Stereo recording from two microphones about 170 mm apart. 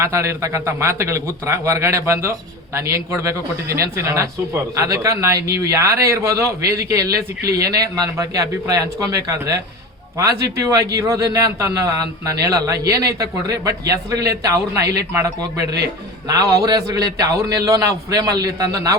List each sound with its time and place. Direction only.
0.0 s a man's voice: 15° right (ahead or behind)